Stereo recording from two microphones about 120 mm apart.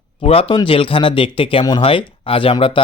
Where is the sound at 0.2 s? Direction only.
55° left (ahead or behind).